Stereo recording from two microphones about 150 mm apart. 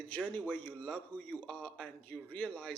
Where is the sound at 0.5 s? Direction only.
10° left (ahead or behind).